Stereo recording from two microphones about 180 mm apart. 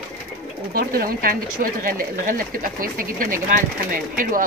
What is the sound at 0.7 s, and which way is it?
Speech, 55° right (ahead or behind).